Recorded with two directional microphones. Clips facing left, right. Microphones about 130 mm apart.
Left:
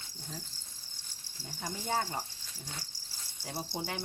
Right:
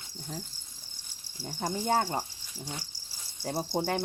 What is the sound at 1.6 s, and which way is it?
Speech, 40° right (ahead or behind).